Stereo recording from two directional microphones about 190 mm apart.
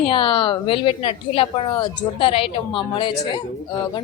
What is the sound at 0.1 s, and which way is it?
A woman's voice, 25° left (ahead or behind).